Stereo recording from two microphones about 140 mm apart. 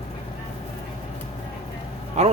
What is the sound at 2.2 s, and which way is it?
Speech, 50° right (ahead or behind).